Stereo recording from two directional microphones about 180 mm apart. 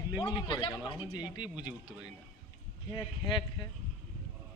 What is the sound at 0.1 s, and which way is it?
Speech, 25° left (ahead or behind).